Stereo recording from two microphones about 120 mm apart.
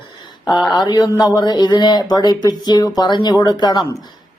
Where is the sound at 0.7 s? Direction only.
40° left (ahead or behind).